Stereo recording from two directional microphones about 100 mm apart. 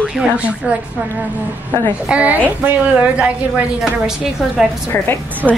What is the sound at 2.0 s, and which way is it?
A woman's voice, 15° right (ahead or behind).